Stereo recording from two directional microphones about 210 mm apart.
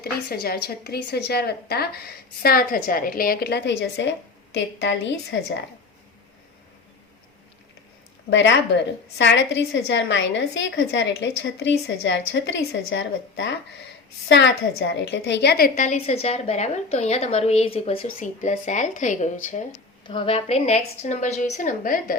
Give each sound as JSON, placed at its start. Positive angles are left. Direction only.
{"t": 0.0, "sound": "a woman's voice", "side_deg": 50}
{"t": 8.3, "sound": "a woman's voice", "side_deg": 60}
{"t": 20.1, "sound": "a woman's voice", "side_deg": 25}